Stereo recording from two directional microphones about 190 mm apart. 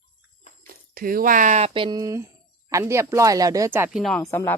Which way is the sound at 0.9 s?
50° right (ahead or behind).